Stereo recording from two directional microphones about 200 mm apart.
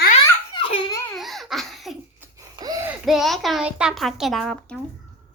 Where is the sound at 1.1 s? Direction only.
Centre (ahead or behind).